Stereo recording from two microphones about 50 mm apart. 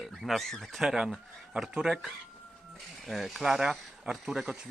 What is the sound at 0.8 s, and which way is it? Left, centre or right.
Speech, centre.